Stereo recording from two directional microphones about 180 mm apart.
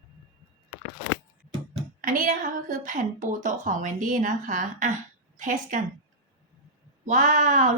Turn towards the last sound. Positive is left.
turn(degrees=-45)  # may be behind; listen again after turning